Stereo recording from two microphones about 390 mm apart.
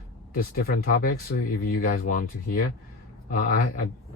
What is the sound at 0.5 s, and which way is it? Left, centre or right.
Speech, left.